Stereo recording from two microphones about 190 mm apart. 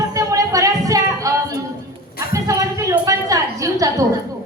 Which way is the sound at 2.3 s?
15° right (ahead or behind).